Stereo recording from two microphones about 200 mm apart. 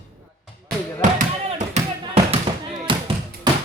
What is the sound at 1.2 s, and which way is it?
Music, 35° right (ahead or behind).